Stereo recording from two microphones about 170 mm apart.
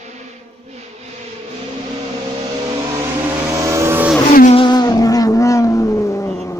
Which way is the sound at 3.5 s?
15° right (ahead or behind).